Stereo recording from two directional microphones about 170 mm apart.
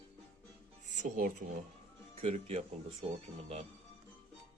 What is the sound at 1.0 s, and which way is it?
Speech, 55° right (ahead or behind).